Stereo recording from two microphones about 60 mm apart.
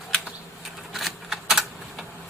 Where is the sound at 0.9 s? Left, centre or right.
Centre.